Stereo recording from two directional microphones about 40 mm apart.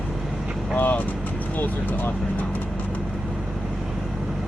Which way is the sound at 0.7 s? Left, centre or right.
Left.